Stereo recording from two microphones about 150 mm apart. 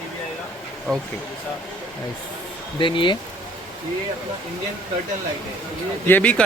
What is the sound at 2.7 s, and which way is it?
Speech, 35° left (ahead or behind).